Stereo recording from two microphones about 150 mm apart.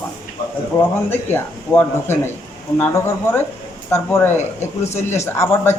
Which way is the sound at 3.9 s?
15° left (ahead or behind).